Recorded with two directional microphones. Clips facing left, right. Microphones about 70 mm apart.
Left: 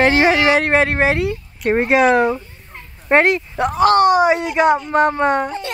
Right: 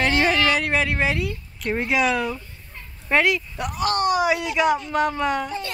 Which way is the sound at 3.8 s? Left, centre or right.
Left.